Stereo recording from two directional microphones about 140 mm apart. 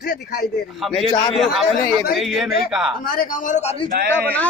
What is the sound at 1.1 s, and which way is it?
Speech, 30° left (ahead or behind).